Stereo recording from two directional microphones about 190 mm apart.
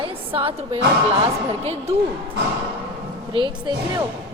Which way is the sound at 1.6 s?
30° right (ahead or behind).